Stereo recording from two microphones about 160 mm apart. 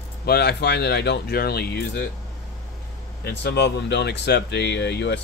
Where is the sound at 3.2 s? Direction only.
90° left.